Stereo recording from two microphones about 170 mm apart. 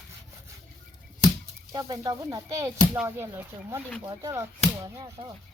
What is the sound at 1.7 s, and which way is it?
Speech, 20° right (ahead or behind).